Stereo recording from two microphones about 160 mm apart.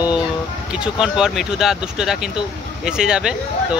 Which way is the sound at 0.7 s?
5° right (ahead or behind).